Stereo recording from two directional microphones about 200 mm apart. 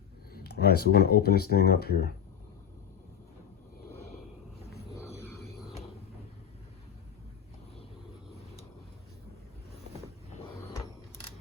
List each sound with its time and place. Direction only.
0.3 s speech: 55° left (ahead or behind)